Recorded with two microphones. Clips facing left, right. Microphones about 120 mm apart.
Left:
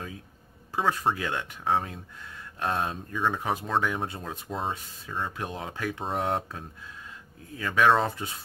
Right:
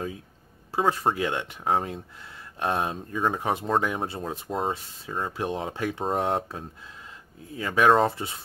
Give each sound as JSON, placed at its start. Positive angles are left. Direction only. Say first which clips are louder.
{"t": 0.7, "sound": "speech", "louder": "right 2 dB", "side_deg": -30}